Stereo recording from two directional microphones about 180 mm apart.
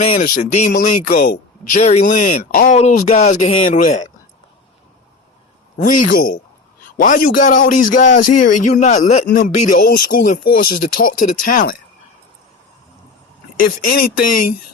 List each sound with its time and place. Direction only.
0.0 s speech: 50° left (ahead or behind)
1.8 s speech: 40° left (ahead or behind)
2.6 s speech: 40° left (ahead or behind)
5.7 s speech: 50° left (ahead or behind)
13.8 s speech: 55° left (ahead or behind)